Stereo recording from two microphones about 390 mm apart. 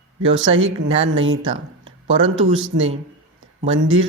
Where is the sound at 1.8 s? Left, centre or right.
Right.